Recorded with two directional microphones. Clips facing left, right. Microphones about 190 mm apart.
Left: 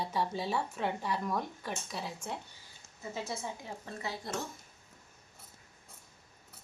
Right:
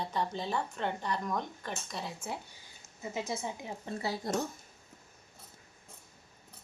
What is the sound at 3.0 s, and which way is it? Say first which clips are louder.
Speech: right 2 dB; 20° right (ahead or behind).